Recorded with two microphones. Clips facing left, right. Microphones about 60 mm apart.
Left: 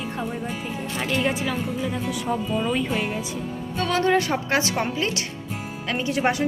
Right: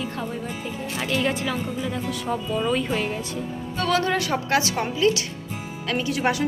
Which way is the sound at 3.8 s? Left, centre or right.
Left.